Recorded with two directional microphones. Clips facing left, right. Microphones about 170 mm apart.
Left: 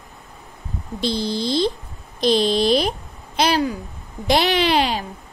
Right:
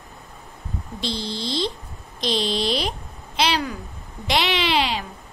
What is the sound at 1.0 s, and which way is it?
Speech, 45° left (ahead or behind).